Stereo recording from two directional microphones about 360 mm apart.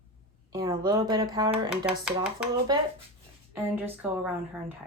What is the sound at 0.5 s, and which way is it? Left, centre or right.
Speech, centre.